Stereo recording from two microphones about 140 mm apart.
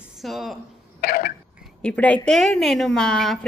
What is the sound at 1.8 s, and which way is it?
A woman's voice, 10° left (ahead or behind).